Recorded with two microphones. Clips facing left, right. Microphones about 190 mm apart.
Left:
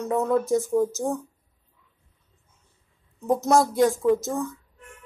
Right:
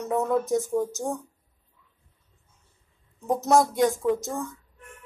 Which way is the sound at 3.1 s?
Centre (ahead or behind).